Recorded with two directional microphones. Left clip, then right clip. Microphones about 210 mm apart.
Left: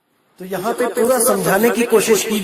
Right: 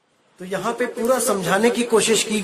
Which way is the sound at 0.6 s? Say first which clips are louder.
Left 5 dB; 30° left (ahead or behind).